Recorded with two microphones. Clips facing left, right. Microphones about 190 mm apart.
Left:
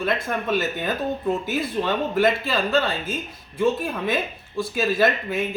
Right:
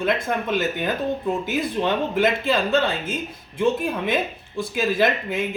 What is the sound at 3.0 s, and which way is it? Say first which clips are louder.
Speech: right 1 dB; 20° left (ahead or behind).